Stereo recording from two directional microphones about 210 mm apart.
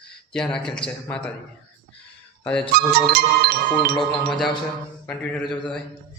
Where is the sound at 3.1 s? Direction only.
45° right (ahead or behind).